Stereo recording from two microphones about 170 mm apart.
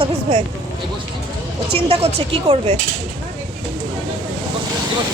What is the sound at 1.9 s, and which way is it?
Speech, 35° right (ahead or behind).